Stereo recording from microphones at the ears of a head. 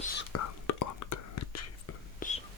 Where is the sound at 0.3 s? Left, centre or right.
Left.